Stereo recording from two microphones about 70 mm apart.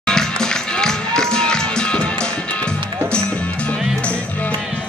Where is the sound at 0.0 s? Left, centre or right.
Centre.